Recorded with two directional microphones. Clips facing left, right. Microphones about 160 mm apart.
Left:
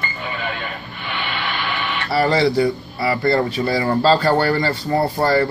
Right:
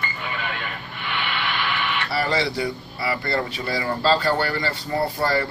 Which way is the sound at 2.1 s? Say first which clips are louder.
Left 9 dB; 40° left (ahead or behind).